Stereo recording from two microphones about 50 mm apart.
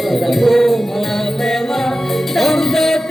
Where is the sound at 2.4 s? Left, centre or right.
Centre.